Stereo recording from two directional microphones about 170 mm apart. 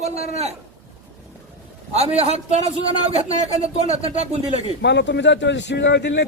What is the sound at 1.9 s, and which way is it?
Speech, 35° right (ahead or behind).